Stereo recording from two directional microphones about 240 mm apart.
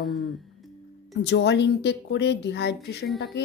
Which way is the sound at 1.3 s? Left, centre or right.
Left.